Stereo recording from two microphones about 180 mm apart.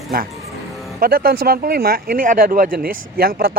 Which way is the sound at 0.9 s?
55° right (ahead or behind).